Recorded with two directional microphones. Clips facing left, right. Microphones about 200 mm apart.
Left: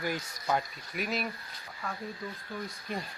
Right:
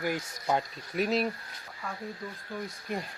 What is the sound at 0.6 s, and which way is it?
Speech, 30° right (ahead or behind).